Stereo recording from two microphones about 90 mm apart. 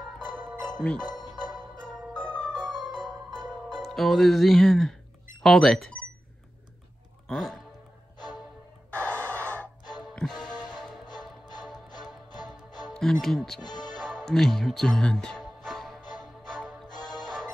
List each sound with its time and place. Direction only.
0.7 s speech: 10° left (ahead or behind)
1.5 s music: 10° left (ahead or behind)
5.4 s speech: 5° left (ahead or behind)
7.2 s speech: 5° left (ahead or behind)
8.9 s owl: 15° left (ahead or behind)
10.1 s music: 10° left (ahead or behind)
11.9 s music: 50° left (ahead or behind)
12.9 s speech: 5° left (ahead or behind)
13.6 s speech: 50° left (ahead or behind)
13.9 s music: 5° left (ahead or behind)
16.9 s music: 50° left (ahead or behind)
17.2 s music: 5° left (ahead or behind)